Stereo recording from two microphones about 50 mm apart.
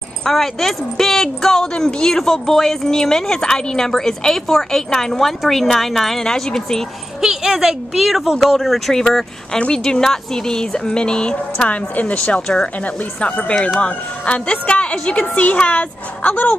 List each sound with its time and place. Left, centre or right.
0.2 s speech: centre
7.2 s speech: centre
11.7 s a woman's voice: left